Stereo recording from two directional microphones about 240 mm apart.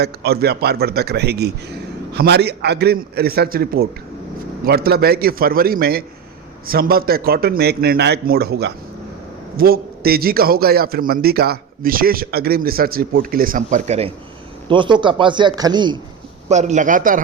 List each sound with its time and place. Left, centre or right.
0.0 s a man's voice: right; by 16.0 s centre
16.5 s a man's voice: right